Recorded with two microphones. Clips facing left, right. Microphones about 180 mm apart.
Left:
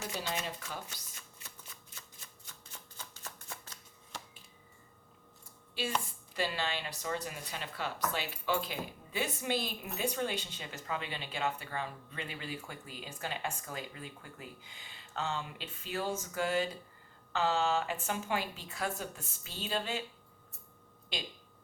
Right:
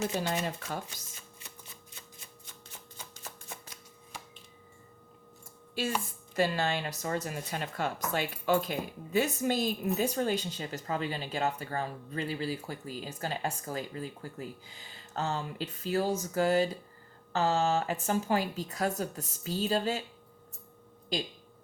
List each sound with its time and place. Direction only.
0.2 s speech: 50° right (ahead or behind)
3.5 s shuffling cards: 15° right (ahead or behind)
6.3 s speech: 45° right (ahead or behind)
21.1 s speech: 40° right (ahead or behind)